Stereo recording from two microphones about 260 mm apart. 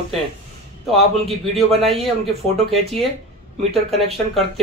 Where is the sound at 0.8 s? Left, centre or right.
Centre.